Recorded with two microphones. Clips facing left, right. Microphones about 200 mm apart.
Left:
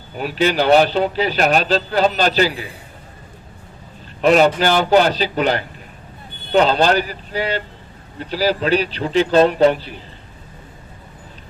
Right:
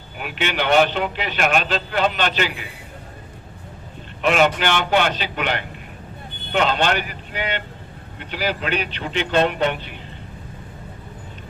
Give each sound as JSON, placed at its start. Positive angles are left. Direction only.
{"t": 0.2, "sound": "speech", "side_deg": 35}
{"t": 4.2, "sound": "speech", "side_deg": 35}